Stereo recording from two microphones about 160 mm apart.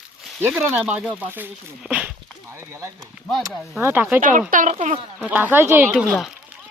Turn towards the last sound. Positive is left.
turn(degrees=5)  # may be behind; listen again after turning